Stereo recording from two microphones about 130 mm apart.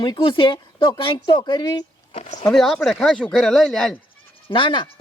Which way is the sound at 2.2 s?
65° left (ahead or behind).